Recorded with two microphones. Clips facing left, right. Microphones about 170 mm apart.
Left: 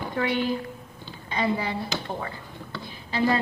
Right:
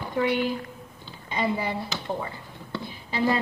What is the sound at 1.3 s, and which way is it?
Speech, 10° right (ahead or behind).